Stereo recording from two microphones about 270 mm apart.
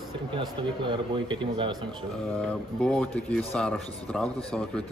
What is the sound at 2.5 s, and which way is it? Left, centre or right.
A man's voice, centre.